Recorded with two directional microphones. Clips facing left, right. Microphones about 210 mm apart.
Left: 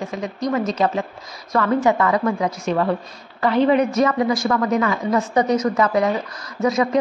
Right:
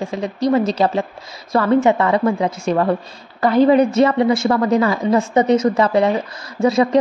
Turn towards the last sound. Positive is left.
turn(degrees=-30)  # may be behind; listen again after turning